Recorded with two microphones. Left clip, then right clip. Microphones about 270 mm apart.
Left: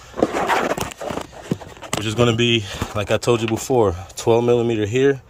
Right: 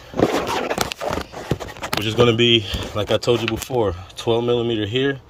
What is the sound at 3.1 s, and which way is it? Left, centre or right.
Speech, centre.